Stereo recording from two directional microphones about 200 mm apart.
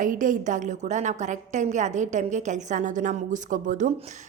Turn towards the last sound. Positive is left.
turn(degrees=-35)  # may be behind; listen again after turning